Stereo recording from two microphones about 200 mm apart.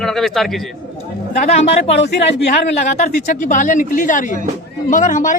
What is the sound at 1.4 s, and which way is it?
A woman's voice, 35° left (ahead or behind).